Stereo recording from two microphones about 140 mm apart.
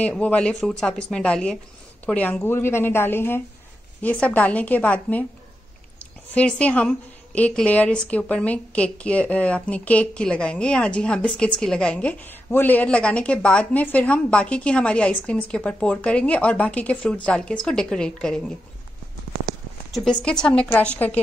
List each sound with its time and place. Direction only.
0.0 s a woman's voice: 10° left (ahead or behind)
19.9 s a woman's voice: 5° left (ahead or behind)